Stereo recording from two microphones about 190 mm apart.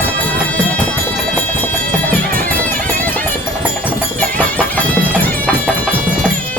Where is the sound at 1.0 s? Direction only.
10° left (ahead or behind).